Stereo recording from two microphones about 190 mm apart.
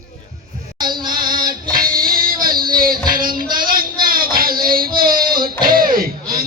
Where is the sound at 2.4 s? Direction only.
50° right (ahead or behind).